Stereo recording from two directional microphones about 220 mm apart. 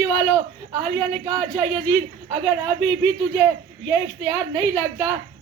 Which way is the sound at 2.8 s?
10° left (ahead or behind).